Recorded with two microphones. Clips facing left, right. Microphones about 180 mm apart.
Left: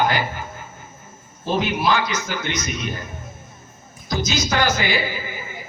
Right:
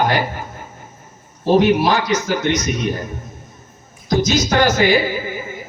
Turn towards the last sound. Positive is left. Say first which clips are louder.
# right 8 dB
turn(degrees=-45)  # may be behind; listen again after turning